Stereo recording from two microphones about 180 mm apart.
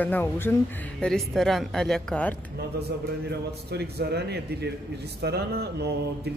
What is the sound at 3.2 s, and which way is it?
A man's voice, 65° right (ahead or behind).